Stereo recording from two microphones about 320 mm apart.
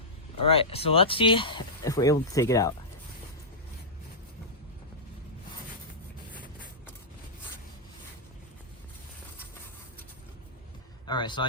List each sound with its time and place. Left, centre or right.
0.4 s speech: centre
11.0 s speech: centre